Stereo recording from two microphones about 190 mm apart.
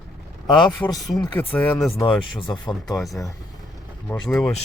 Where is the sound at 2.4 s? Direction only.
25° left (ahead or behind).